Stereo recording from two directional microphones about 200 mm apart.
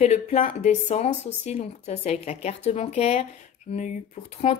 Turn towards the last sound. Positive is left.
turn(degrees=35)  # may be behind; listen again after turning